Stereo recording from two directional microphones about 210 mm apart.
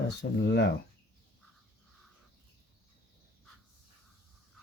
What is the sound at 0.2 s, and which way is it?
Speech, 55° left (ahead or behind).